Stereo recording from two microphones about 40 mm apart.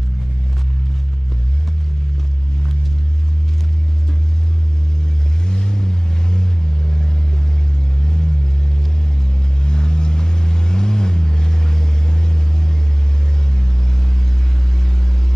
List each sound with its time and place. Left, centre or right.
5.5 s vehicle: centre
9.6 s vehicle: centre